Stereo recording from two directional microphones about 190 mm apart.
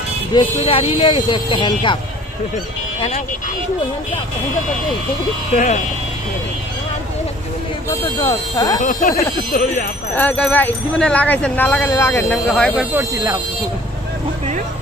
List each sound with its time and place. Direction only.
0.3 s speech: 30° left (ahead or behind)
5.5 s speech: 40° left (ahead or behind)
7.9 s speech: 15° left (ahead or behind)
8.8 s speech: 45° left (ahead or behind)
10.2 s speech: 10° left (ahead or behind); by 13.3 s 10° right (ahead or behind)